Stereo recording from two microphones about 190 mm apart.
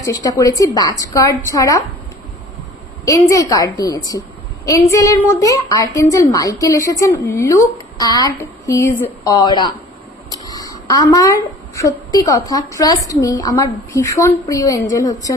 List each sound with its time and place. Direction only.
0.0 s a woman's voice: 20° left (ahead or behind)
3.1 s a woman's voice: 15° left (ahead or behind)